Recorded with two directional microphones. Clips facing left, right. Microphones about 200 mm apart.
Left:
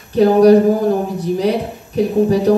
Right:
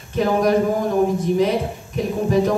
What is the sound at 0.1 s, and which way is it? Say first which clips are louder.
Speech: left 8 dB; 35° left (ahead or behind).